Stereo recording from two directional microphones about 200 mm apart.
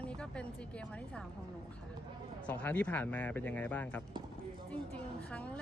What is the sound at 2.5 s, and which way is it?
Speech, 5° left (ahead or behind).